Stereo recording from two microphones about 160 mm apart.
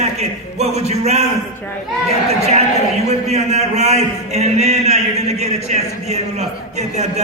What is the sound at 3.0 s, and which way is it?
A man's voice, 45° right (ahead or behind).